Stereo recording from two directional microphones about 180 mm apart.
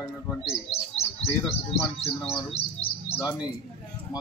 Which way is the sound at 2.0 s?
30° left (ahead or behind).